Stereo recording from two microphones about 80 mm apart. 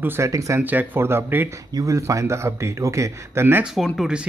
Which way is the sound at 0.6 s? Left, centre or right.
Right.